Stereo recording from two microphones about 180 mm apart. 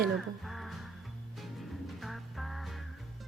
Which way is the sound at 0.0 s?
Centre (ahead or behind).